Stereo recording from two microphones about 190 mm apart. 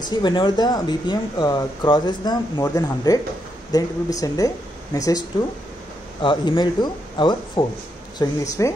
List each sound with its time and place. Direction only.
0.0 s speech: 25° left (ahead or behind)
6.2 s speech: 25° left (ahead or behind)